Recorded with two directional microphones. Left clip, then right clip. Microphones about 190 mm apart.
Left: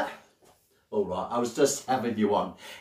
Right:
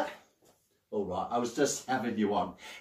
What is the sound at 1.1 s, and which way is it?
Speech, 20° left (ahead or behind).